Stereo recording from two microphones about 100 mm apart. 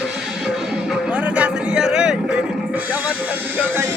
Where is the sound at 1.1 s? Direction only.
15° right (ahead or behind).